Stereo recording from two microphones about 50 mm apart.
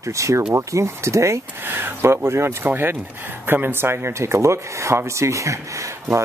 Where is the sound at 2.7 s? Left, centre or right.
Right.